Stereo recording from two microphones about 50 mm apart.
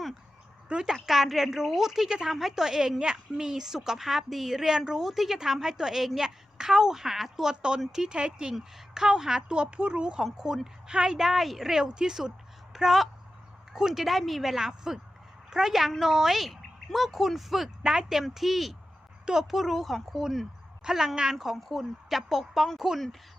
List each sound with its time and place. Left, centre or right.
0.7 s a woman's voice: centre